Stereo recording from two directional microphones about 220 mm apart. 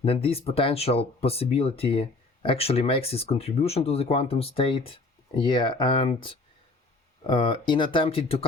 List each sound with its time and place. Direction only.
0.0 s speech: 25° left (ahead or behind)